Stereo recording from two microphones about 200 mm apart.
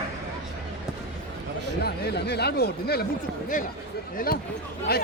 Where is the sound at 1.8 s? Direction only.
55° left (ahead or behind).